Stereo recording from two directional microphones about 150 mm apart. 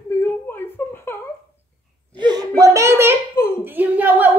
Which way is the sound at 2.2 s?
25° right (ahead or behind).